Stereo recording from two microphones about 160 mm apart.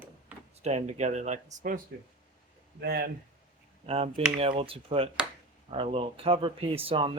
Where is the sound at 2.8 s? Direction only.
75° right (ahead or behind).